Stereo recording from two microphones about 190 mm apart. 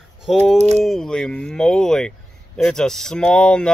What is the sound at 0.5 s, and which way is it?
Speech, 35° right (ahead or behind).